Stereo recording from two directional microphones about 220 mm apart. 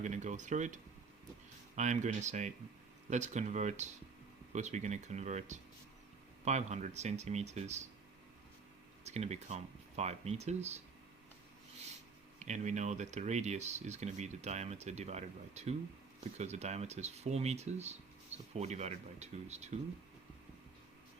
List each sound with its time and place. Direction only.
0.0 s speech: 35° right (ahead or behind)
9.0 s speech: 30° right (ahead or behind)
12.4 s speech: 35° right (ahead or behind)